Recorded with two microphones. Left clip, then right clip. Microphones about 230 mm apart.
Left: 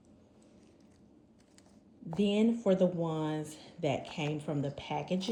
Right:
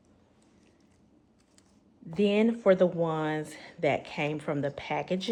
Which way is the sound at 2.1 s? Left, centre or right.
Centre.